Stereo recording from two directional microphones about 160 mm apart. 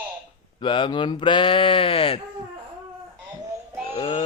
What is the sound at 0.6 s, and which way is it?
Speech, 30° left (ahead or behind).